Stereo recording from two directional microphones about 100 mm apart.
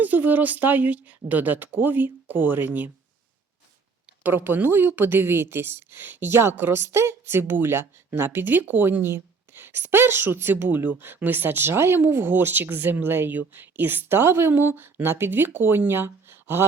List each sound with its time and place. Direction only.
0.0 s a woman's voice: 15° right (ahead or behind)
4.2 s a woman's voice: 20° right (ahead or behind)